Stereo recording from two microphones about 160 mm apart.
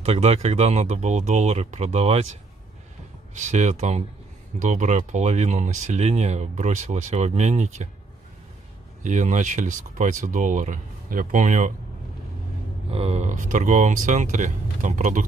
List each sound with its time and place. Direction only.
0.0 s speech: 40° right (ahead or behind)
3.3 s speech: 50° right (ahead or behind)
9.0 s speech: 50° right (ahead or behind)
12.9 s speech: 40° right (ahead or behind)